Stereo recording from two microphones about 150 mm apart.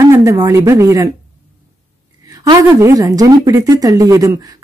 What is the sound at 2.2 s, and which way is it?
Speech, 25° right (ahead or behind).